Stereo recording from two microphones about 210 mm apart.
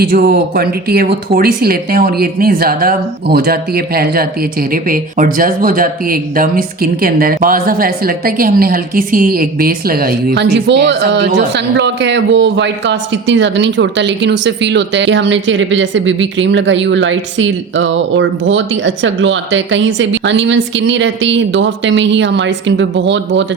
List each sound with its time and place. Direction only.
0.0 s a man's voice: 45° right (ahead or behind)